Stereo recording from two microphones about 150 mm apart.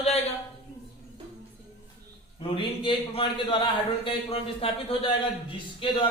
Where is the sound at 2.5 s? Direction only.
35° left (ahead or behind).